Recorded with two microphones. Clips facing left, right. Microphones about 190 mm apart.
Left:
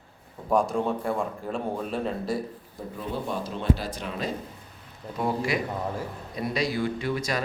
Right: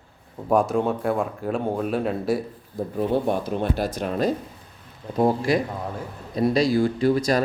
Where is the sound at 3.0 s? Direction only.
60° right (ahead or behind).